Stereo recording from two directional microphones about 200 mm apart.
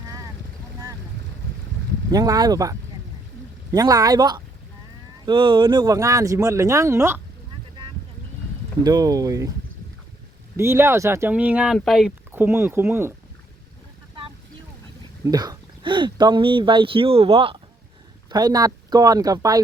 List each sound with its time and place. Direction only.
2.1 s speech: 20° right (ahead or behind)
8.8 s speech: 20° right (ahead or behind)
10.6 s speech: 10° right (ahead or behind)
15.2 s speech: 20° right (ahead or behind)